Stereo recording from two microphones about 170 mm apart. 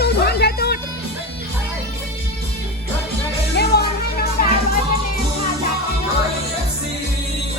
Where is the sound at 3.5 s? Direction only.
65° left (ahead or behind).